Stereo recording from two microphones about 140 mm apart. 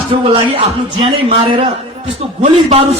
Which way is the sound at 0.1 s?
40° right (ahead or behind).